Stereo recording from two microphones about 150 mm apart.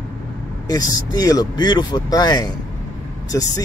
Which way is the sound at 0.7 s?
25° left (ahead or behind).